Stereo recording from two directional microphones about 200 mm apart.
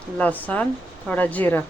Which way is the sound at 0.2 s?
10° left (ahead or behind).